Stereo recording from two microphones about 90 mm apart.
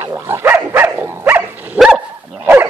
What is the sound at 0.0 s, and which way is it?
Dog, 30° right (ahead or behind).